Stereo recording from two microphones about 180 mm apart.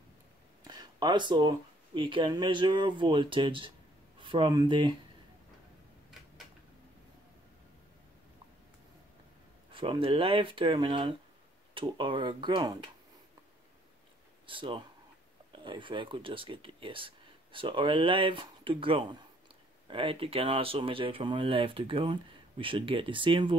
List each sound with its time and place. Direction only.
0.7 s speech: 25° right (ahead or behind)
9.7 s speech: 30° right (ahead or behind)
14.4 s speech: 30° right (ahead or behind)